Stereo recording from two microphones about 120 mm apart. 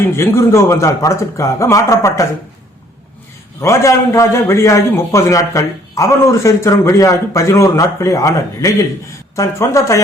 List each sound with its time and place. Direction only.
0.0 s a man's voice: 25° left (ahead or behind)
3.6 s a man's voice: 25° left (ahead or behind)